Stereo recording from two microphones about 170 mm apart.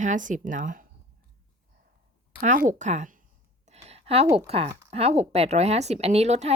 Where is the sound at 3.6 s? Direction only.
40° right (ahead or behind).